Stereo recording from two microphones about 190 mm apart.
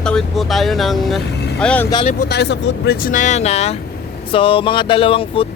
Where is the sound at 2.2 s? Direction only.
60° left (ahead or behind).